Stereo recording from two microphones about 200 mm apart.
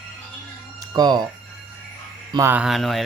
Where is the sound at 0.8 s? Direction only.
20° right (ahead or behind).